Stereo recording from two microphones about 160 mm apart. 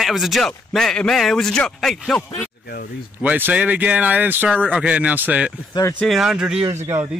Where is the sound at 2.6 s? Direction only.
70° left (ahead or behind).